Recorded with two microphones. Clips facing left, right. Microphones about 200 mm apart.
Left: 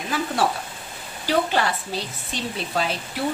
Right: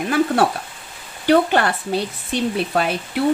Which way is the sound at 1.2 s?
55° right (ahead or behind).